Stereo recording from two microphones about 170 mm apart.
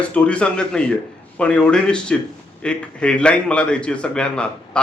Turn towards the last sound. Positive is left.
turn(degrees=5)  # may be behind; listen again after turning